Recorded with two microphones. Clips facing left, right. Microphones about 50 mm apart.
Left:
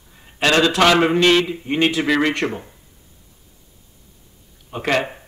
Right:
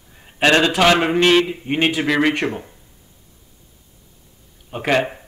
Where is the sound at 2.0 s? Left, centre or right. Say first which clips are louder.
Right 1 dB; centre.